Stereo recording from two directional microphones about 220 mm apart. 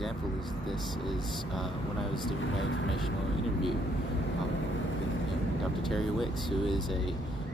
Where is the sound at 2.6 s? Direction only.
60° left (ahead or behind).